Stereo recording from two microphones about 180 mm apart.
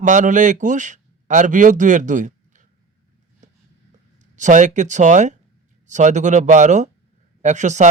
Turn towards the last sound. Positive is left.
turn(degrees=-40)  # may be behind; listen again after turning